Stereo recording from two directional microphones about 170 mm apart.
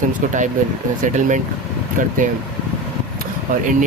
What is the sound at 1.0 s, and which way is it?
Speech, 45° right (ahead or behind).